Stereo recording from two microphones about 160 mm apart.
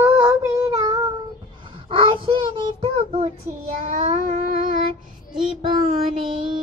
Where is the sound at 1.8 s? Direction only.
30° right (ahead or behind).